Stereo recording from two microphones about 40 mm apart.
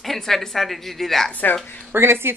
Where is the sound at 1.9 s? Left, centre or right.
Right.